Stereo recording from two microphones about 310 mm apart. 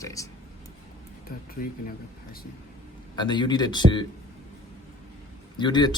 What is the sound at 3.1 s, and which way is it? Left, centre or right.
Speech, centre.